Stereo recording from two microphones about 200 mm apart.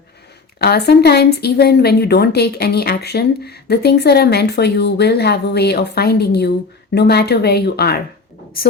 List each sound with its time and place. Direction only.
0.6 s speech: 55° left (ahead or behind)